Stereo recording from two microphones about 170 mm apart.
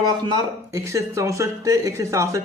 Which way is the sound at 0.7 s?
15° right (ahead or behind).